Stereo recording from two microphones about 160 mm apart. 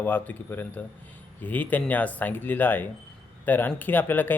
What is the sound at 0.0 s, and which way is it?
Speech, 10° left (ahead or behind).